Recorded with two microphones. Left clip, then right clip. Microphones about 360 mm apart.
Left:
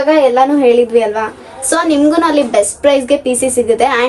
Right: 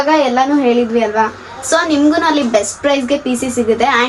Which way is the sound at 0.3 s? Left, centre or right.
Centre.